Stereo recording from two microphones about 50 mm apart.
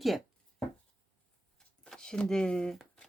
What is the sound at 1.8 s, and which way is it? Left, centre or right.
Speech, centre.